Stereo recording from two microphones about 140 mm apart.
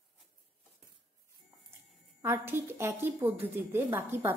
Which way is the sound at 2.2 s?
15° right (ahead or behind).